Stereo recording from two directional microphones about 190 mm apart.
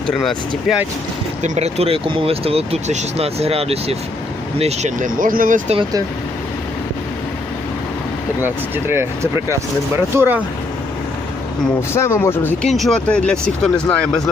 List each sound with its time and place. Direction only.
0.1 s speech: centre (ahead or behind)
1.4 s speech: 35° right (ahead or behind)
8.4 s speech: 10° right (ahead or behind)
11.9 s speech: 15° left (ahead or behind)